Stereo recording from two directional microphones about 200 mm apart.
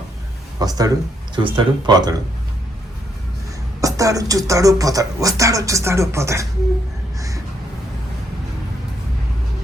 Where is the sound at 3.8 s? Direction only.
15° right (ahead or behind).